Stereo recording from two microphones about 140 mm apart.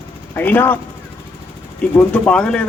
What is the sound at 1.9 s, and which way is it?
Speech, 10° left (ahead or behind).